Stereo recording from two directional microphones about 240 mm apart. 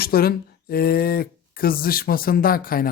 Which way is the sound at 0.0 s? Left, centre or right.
Left.